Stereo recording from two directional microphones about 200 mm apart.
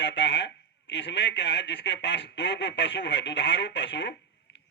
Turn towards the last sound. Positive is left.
turn(degrees=60)  # may be behind; listen again after turning